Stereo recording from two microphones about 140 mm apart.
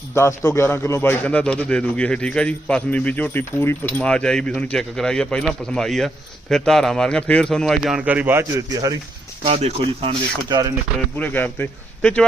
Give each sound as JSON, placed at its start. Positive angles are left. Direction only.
{"t": 0.1, "sound": "a man's voice", "side_deg": 20}
{"t": 9.5, "sound": "speech", "side_deg": -50}
{"t": 11.2, "sound": "a man's voice", "side_deg": 15}